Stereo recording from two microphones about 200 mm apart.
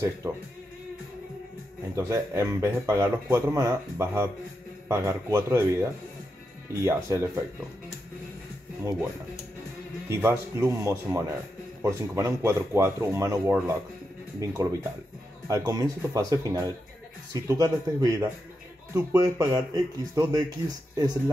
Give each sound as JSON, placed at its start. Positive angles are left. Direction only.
{"t": 0.2, "sound": "speech", "side_deg": -15}
{"t": 2.0, "sound": "speech", "side_deg": -15}
{"t": 10.0, "sound": "speech", "side_deg": -15}